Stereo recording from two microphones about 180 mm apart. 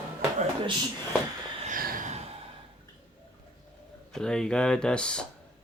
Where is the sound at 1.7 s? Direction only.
50° right (ahead or behind).